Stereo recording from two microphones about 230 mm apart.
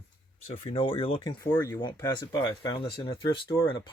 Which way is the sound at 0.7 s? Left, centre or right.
Left.